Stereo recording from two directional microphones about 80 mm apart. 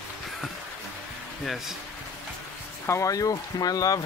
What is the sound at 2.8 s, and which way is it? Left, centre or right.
Speech, left.